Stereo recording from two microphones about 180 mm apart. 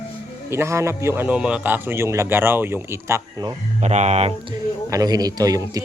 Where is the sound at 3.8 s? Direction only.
40° right (ahead or behind).